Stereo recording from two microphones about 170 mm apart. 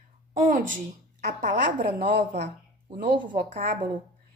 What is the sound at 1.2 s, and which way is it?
A woman's voice, 50° right (ahead or behind).